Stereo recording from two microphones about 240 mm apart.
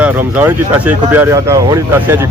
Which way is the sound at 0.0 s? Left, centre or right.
Centre.